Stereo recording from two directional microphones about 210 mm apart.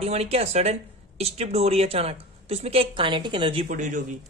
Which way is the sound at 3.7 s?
35° right (ahead or behind).